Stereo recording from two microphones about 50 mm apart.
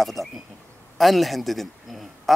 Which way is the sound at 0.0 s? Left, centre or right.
Centre.